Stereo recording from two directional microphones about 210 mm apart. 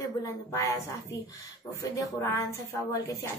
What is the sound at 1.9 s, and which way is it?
Speech, 15° left (ahead or behind).